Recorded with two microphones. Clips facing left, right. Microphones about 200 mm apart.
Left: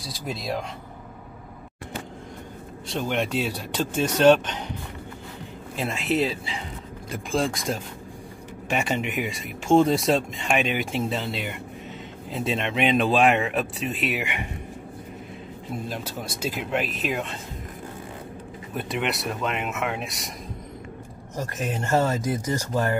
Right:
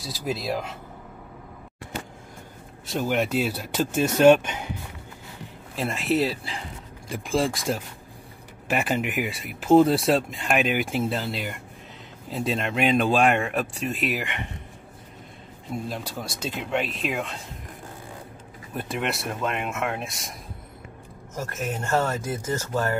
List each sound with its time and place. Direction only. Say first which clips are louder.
0.0 s speech: right 3 dB; centre (ahead or behind)
2.9 s speech: right 2 dB; 5° right (ahead or behind)
5.8 s speech: right 1 dB; centre (ahead or behind)
15.7 s speech: right 1 dB; 5° left (ahead or behind)
18.8 s speech: left 1 dB; centre (ahead or behind)
21.4 s speech: left 1 dB; 15° left (ahead or behind)